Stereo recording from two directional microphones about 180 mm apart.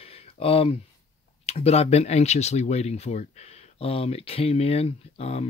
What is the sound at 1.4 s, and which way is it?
Speech, 35° left (ahead or behind).